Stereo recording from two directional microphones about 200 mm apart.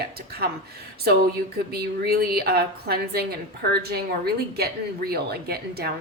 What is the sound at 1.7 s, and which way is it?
A woman's voice, 50° right (ahead or behind).